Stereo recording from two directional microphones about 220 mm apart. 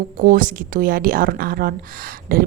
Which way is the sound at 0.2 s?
40° right (ahead or behind).